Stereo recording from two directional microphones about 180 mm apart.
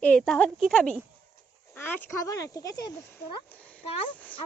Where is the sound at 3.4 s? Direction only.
5° left (ahead or behind).